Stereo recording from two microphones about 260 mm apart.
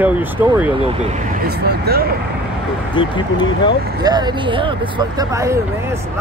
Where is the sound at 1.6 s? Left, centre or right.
Right.